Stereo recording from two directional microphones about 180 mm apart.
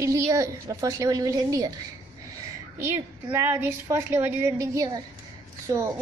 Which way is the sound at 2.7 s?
15° right (ahead or behind).